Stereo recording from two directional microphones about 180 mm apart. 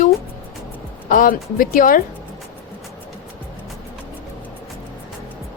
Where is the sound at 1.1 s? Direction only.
50° left (ahead or behind).